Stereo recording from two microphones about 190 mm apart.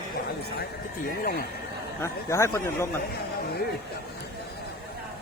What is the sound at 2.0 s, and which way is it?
Speech, 15° left (ahead or behind).